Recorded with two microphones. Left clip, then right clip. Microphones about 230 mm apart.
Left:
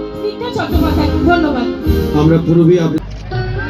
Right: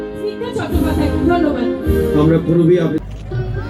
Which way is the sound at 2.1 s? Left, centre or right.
Left.